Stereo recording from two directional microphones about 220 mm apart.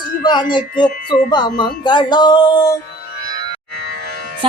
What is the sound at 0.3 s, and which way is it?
Music, 20° left (ahead or behind).